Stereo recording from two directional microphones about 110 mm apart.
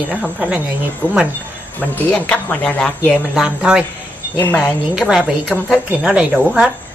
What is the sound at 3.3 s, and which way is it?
A woman's voice, 5° right (ahead or behind).